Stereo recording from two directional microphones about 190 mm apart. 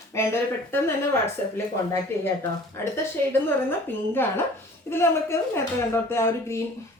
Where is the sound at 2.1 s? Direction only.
15° left (ahead or behind).